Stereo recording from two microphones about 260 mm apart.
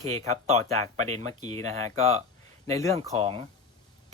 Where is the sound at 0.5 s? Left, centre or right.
Right.